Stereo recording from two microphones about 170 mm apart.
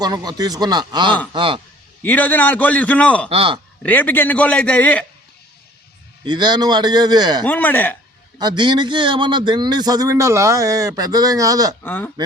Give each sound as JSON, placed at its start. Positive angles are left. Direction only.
{"t": 0.0, "sound": "a man's voice", "side_deg": -25}
{"t": 2.0, "sound": "a man's voice", "side_deg": 10}
{"t": 3.2, "sound": "speech", "side_deg": -35}
{"t": 3.8, "sound": "a man's voice", "side_deg": 10}
{"t": 6.2, "sound": "a man's voice", "side_deg": -25}
{"t": 7.4, "sound": "a man's voice", "side_deg": 10}
{"t": 8.4, "sound": "a man's voice", "side_deg": -25}
{"t": 11.8, "sound": "a man's voice", "side_deg": 10}